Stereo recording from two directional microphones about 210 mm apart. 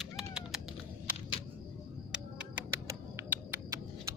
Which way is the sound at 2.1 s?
5° right (ahead or behind).